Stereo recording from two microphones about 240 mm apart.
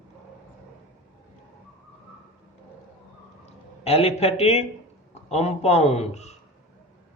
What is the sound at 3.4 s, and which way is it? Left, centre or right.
A man's voice, left.